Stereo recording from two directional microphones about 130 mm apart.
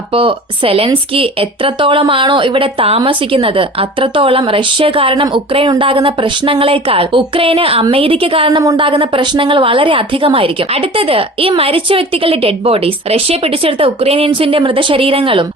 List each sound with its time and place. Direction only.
0.1 s a woman's voice: 45° right (ahead or behind)